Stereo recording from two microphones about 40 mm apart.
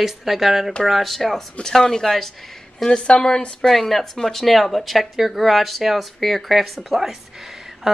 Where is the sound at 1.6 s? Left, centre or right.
Centre.